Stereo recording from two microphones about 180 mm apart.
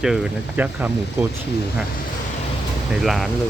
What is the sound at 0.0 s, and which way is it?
Speech, 5° right (ahead or behind).